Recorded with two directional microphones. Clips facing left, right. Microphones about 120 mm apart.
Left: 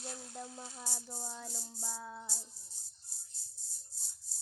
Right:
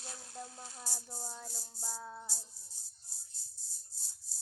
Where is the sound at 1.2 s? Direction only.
10° right (ahead or behind).